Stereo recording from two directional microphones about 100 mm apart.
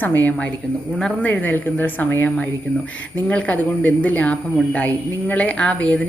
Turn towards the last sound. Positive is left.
turn(degrees=10)  # may be behind; listen again after turning